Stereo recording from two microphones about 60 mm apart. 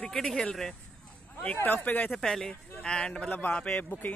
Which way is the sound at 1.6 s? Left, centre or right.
Left.